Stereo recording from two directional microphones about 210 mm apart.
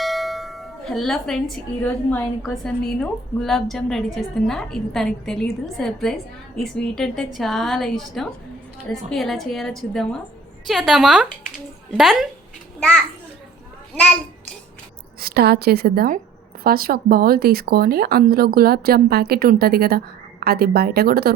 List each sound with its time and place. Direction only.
0.0 s a woman's voice: centre (ahead or behind)
15.2 s speech: 50° right (ahead or behind)